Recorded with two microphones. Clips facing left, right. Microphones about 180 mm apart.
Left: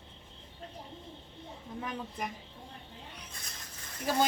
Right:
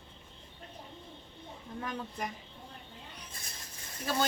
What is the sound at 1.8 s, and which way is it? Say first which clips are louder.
Speech: even; 5° left (ahead or behind).